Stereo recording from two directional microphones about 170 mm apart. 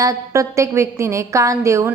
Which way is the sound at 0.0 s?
20° right (ahead or behind).